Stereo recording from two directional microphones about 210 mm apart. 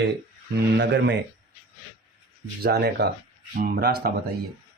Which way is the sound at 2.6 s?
50° right (ahead or behind).